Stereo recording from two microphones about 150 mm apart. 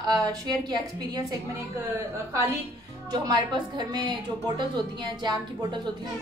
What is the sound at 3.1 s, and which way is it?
Speech, 30° right (ahead or behind).